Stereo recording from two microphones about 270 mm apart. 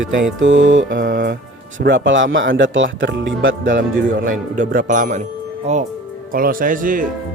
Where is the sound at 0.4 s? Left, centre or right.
Right.